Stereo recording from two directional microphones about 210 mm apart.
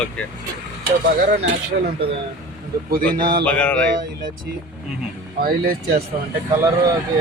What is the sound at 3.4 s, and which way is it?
Speech, 5° left (ahead or behind).